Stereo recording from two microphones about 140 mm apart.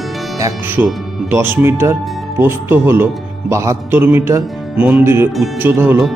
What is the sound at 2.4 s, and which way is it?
Speech, 15° right (ahead or behind).